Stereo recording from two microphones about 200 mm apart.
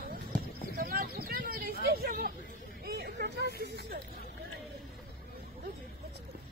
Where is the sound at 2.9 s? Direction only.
55° right (ahead or behind).